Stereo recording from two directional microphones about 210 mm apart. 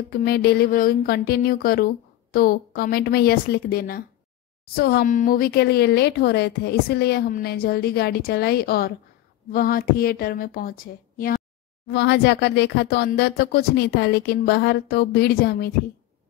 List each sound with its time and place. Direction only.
0.1 s speech: 45° left (ahead or behind)
11.9 s speech: 55° left (ahead or behind)